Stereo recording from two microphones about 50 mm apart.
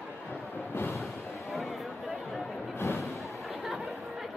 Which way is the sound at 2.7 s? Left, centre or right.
Left.